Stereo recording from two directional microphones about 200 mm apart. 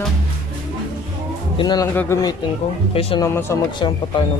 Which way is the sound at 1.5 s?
20° left (ahead or behind).